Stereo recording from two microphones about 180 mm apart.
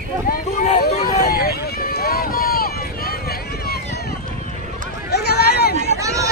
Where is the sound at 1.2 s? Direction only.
60° left (ahead or behind).